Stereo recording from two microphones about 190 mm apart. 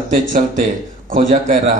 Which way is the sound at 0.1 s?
45° right (ahead or behind).